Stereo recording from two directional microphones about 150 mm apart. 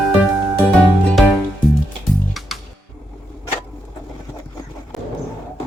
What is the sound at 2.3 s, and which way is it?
Music, centre (ahead or behind).